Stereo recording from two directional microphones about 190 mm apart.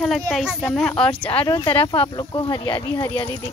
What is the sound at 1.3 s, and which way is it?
Speech, 25° left (ahead or behind).